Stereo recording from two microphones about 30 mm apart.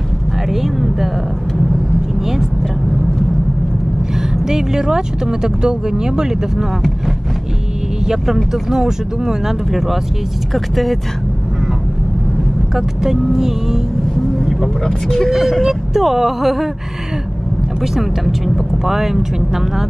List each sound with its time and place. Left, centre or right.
0.5 s speech: centre
4.5 s speech: centre
8.6 s speech: centre
12.7 s speech: centre
14.4 s vehicle: centre
15.6 s speech: centre
18.9 s speech: centre